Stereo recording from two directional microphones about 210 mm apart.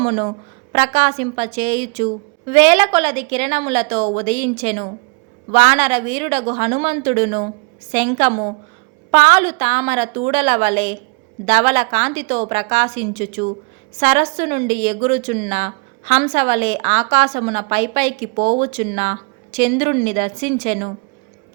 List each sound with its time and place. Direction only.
0.0 s a woman's voice: 35° right (ahead or behind)